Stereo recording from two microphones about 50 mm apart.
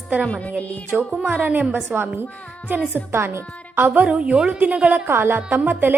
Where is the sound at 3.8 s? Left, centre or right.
Right.